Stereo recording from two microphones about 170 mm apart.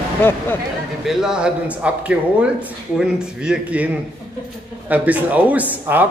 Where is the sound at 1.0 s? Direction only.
5° right (ahead or behind).